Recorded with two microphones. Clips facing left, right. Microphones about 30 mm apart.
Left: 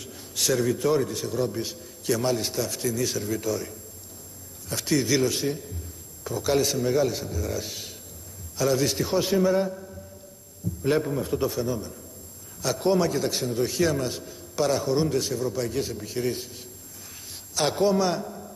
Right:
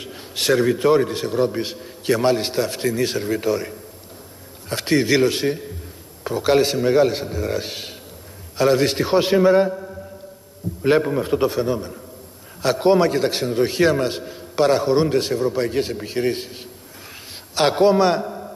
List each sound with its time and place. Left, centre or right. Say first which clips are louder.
0.0 s a man's voice: right 5 dB; right